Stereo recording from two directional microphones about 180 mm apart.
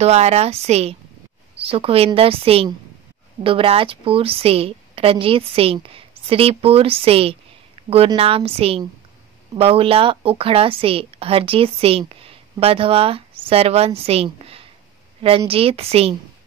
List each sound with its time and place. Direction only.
0.0 s a woman's voice: 35° right (ahead or behind)
7.8 s a sound: 35° right (ahead or behind)
8.1 s a woman's voice: 30° right (ahead or behind)